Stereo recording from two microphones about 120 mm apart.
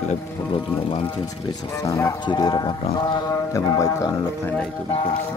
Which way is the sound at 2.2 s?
40° left (ahead or behind).